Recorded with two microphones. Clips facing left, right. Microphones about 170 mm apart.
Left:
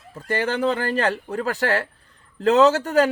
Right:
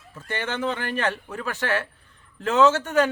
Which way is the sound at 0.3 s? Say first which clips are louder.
Left 6 dB; 35° left (ahead or behind).